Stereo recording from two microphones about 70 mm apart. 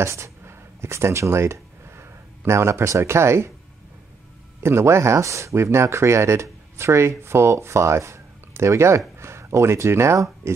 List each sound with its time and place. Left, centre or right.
0.0 s speech: right
4.6 s speech: right